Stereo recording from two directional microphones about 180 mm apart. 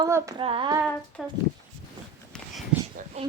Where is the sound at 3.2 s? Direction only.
35° right (ahead or behind).